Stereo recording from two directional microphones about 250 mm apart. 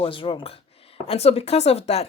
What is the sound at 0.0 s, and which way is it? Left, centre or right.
Speech, left.